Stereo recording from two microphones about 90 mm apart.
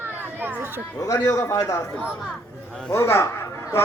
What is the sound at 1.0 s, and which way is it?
Speech, 40° left (ahead or behind).